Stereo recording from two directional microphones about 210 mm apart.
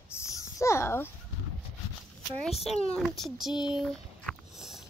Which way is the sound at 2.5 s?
30° left (ahead or behind).